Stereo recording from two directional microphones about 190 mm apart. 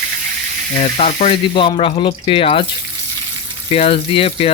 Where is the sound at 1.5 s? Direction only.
25° left (ahead or behind).